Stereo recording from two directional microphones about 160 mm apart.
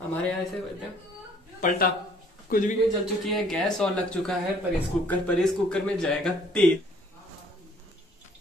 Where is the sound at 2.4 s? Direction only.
60° left (ahead or behind).